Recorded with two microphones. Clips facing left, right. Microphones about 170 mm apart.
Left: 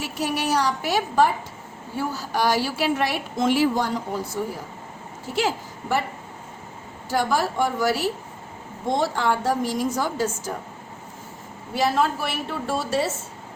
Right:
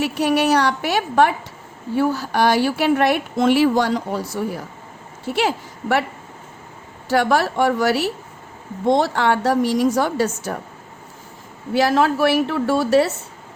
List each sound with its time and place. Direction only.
0.0 s a woman's voice: 65° right (ahead or behind)
5.3 s a woman's voice: 65° right (ahead or behind)
7.1 s a woman's voice: 70° right (ahead or behind)
11.7 s a woman's voice: 75° right (ahead or behind)